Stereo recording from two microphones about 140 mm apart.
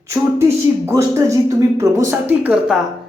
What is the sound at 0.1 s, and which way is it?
Speech, 20° right (ahead or behind).